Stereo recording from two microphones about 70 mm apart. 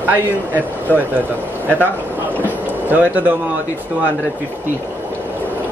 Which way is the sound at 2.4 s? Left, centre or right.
Right.